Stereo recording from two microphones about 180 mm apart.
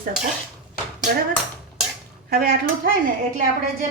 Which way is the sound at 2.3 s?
55° right (ahead or behind).